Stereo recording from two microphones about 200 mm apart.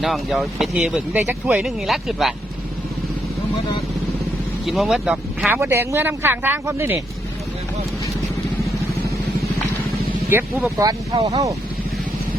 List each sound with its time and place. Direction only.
0.0 s speech: centre (ahead or behind)
4.6 s speech: centre (ahead or behind)
10.3 s speech: 10° right (ahead or behind)